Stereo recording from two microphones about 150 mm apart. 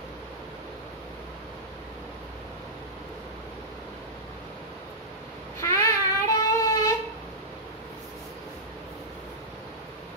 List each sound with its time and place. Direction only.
5.6 s child singing: 20° left (ahead or behind)